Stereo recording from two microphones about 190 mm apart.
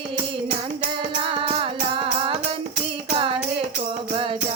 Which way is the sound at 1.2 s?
25° right (ahead or behind).